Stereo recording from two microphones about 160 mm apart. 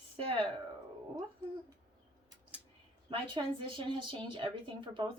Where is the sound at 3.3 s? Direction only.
30° right (ahead or behind).